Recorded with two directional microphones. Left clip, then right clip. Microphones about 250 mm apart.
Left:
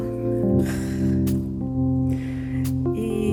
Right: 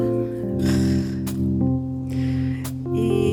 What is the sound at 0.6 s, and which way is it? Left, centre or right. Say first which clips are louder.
Music: right 6 dB; centre.